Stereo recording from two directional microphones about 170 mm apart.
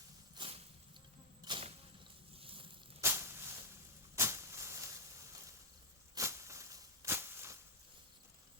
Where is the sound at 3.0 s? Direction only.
15° right (ahead or behind).